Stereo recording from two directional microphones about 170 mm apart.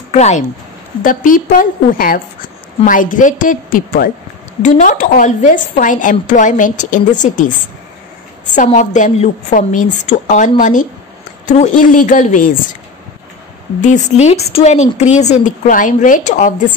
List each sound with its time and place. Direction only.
0.1 s speech: 40° left (ahead or behind)
1.0 s a woman's voice: 55° left (ahead or behind)
4.6 s a woman's voice: 45° left (ahead or behind)
8.7 s a woman's voice: 45° left (ahead or behind)
13.7 s a woman's voice: 45° left (ahead or behind)